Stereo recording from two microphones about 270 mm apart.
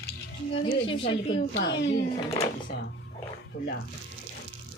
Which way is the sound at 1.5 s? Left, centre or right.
Left.